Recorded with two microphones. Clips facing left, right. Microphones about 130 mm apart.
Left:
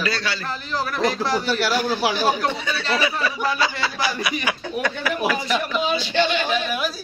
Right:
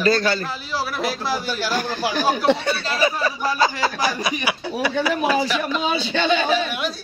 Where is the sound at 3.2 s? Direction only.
40° right (ahead or behind).